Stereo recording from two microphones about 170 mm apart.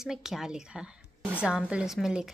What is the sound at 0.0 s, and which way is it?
A woman's voice, centre (ahead or behind).